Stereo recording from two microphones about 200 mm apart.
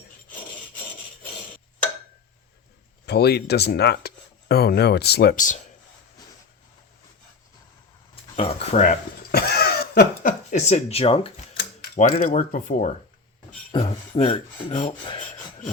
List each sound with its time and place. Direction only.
3.1 s speech: 55° left (ahead or behind)
8.4 s speech: 30° left (ahead or behind)
9.3 s a sound: 50° left (ahead or behind); by 11.4 s 30° left (ahead or behind)
11.8 s speech: 45° left (ahead or behind)
13.7 s filing: 30° left (ahead or behind)